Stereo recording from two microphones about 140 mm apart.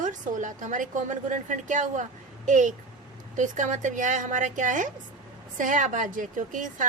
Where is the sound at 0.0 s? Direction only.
65° right (ahead or behind).